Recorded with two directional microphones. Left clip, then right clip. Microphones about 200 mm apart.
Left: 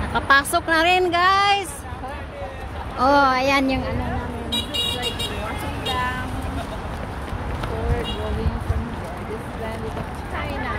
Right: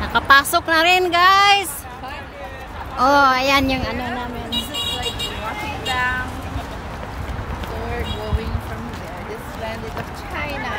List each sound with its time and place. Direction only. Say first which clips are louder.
0.1 s speech: right 4 dB; 10° right (ahead or behind)
3.0 s speech: right 2 dB; 5° right (ahead or behind)
5.9 s music: right 3 dB; 5° left (ahead or behind)